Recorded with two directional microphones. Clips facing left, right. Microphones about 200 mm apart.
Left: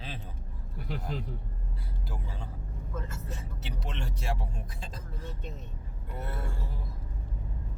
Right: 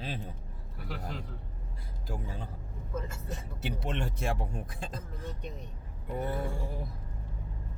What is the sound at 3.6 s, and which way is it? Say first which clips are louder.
Speech: right 7 dB; 50° right (ahead or behind).